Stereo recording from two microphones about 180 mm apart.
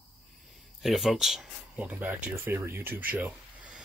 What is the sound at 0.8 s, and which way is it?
Speech, centre (ahead or behind).